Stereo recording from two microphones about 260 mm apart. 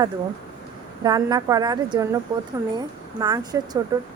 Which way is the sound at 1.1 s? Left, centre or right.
Centre.